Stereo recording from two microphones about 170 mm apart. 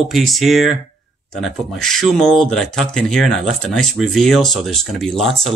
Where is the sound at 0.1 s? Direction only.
Centre (ahead or behind).